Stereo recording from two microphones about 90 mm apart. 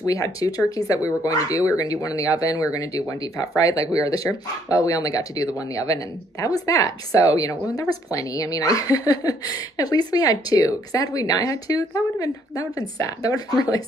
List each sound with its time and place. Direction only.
0.0 s a woman's voice: 40° left (ahead or behind)